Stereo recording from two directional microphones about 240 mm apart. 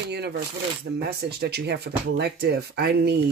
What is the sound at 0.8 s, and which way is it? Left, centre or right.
Speech, right.